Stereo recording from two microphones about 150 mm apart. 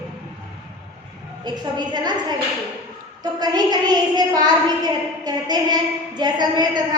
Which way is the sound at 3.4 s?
25° right (ahead or behind).